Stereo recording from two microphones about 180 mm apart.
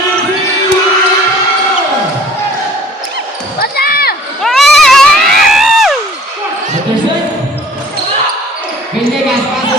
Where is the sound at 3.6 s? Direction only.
60° left (ahead or behind).